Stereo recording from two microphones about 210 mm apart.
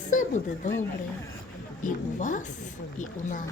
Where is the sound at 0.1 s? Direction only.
40° left (ahead or behind).